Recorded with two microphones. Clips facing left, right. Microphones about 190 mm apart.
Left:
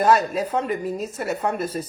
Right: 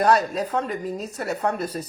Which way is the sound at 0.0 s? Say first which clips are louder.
Left 1 dB; centre (ahead or behind).